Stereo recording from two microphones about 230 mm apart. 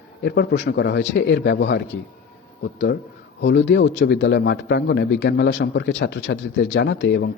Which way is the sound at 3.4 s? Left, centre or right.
Left.